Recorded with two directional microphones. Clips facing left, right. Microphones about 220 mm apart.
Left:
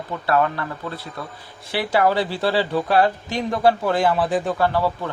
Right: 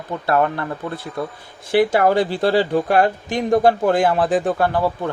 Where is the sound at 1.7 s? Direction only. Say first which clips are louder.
Right 5 dB; 50° right (ahead or behind).